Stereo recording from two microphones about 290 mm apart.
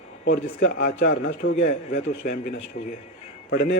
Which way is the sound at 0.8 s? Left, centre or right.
Left.